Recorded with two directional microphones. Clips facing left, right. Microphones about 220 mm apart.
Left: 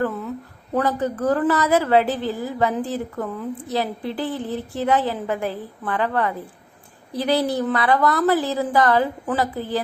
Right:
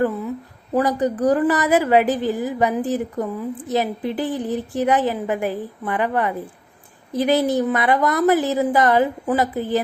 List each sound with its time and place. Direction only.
0.0 s a woman's voice: 10° right (ahead or behind)